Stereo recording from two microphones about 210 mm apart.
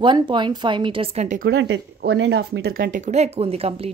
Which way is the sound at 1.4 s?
55° right (ahead or behind).